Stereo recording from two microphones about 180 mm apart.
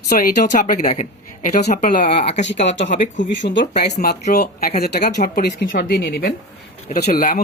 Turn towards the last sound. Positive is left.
turn(degrees=50)  # may be behind; listen again after turning